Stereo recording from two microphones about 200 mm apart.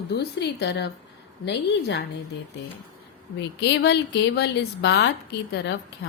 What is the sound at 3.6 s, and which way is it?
A woman's voice, 55° left (ahead or behind).